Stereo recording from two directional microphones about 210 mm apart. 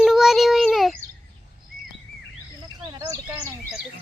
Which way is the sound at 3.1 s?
15° right (ahead or behind).